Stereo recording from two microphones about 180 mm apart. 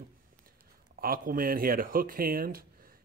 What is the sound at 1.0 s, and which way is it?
Speech, 55° right (ahead or behind).